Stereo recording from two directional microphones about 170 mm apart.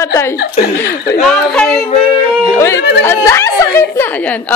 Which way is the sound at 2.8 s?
75° left (ahead or behind).